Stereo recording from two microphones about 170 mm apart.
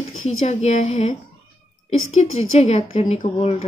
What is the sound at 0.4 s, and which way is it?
Speech, 40° left (ahead or behind).